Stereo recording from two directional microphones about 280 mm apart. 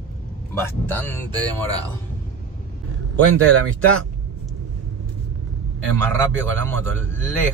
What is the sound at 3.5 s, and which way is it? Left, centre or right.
Speech, right.